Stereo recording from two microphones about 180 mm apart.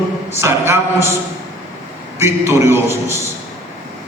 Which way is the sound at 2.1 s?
15° right (ahead or behind).